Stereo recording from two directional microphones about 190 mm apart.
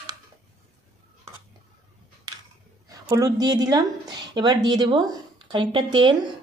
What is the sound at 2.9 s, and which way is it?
A woman's voice, 15° right (ahead or behind).